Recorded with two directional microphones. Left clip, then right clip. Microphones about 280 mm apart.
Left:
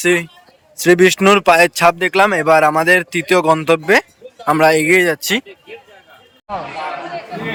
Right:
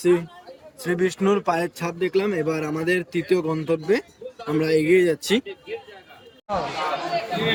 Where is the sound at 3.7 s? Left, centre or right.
Left.